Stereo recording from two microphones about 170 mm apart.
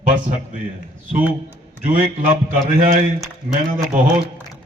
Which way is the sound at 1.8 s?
50° right (ahead or behind).